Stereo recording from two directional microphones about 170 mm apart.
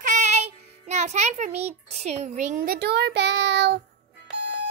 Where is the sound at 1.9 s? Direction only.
40° right (ahead or behind); by 3.8 s 90° right.